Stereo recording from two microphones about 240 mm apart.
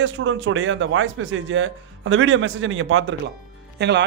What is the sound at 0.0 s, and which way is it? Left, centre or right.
A man's voice, right.